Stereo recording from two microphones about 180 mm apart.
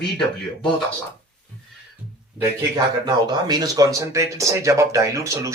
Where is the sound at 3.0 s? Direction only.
25° right (ahead or behind).